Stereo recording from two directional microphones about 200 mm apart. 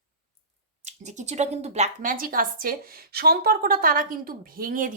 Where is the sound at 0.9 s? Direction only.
35° right (ahead or behind).